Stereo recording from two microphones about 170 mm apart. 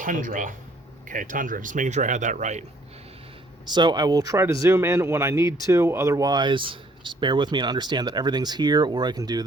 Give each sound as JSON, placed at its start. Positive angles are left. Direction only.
{"t": 0.0, "sound": "speech", "side_deg": -50}
{"t": 3.7, "sound": "speech", "side_deg": -25}